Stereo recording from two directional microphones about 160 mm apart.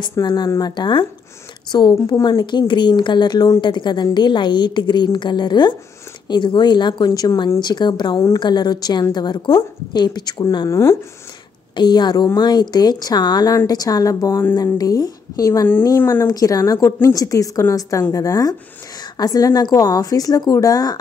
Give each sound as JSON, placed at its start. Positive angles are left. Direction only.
{"t": 0.1, "sound": "a woman's voice", "side_deg": 25}